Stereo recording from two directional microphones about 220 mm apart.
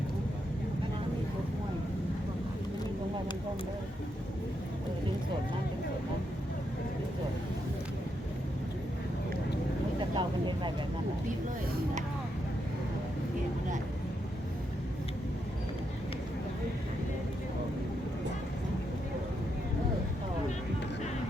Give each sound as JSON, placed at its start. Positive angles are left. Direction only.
{"t": 10.2, "sound": "speech", "side_deg": -20}